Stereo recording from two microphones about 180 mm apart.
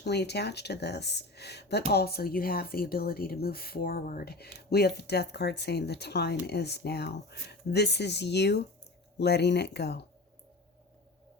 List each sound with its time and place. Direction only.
0.0 s speech: 70° left (ahead or behind)